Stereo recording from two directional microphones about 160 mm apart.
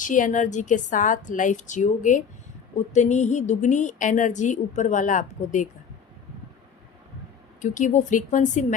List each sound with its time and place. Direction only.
0.0 s a woman's voice: 55° left (ahead or behind)
7.6 s a woman's voice: 50° left (ahead or behind)